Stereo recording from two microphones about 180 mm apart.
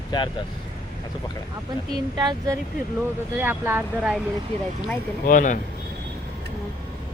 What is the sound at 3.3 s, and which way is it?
Speech, 10° right (ahead or behind).